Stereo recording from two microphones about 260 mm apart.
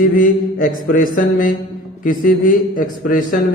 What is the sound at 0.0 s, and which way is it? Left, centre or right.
A man's voice, left.